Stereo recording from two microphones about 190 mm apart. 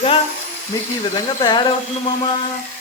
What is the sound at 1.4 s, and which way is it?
Speech, 25° left (ahead or behind).